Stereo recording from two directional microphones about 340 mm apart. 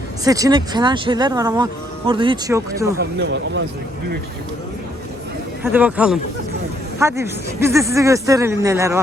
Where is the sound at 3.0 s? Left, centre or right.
Right.